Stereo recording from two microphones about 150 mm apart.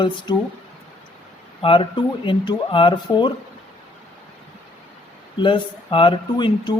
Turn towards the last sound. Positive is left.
turn(degrees=30)  # may be behind; listen again after turning